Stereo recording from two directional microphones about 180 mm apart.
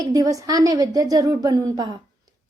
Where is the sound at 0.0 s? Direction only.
20° right (ahead or behind).